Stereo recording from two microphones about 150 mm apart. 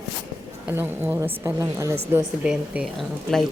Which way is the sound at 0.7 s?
15° right (ahead or behind).